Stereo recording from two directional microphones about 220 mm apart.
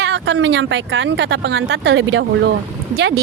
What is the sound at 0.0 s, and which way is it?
A woman's voice, 55° right (ahead or behind).